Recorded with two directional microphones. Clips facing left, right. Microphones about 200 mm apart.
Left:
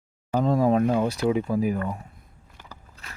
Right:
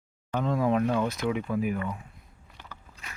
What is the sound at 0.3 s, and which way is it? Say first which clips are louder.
Speech: left 5 dB; 35° left (ahead or behind).